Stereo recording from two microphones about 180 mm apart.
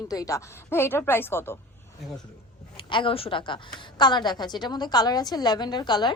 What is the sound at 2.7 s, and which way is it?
A woman's voice, 30° left (ahead or behind).